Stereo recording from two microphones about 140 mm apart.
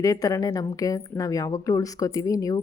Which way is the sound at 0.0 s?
25° left (ahead or behind).